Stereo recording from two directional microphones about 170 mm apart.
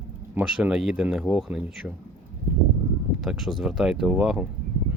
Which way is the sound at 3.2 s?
Centre (ahead or behind).